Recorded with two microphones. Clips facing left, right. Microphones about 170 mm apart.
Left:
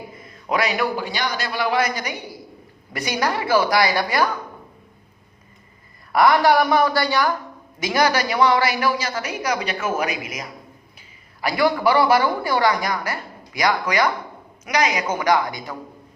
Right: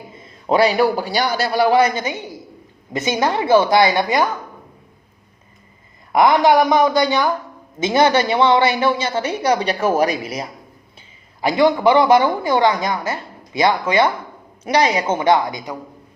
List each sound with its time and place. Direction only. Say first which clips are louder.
0.1 s a man's voice: right 7 dB; 25° right (ahead or behind)
6.1 s a woman's voice: right 3 dB; 20° right (ahead or behind)